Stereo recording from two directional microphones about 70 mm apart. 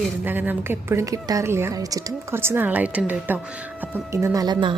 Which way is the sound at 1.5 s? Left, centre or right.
Right.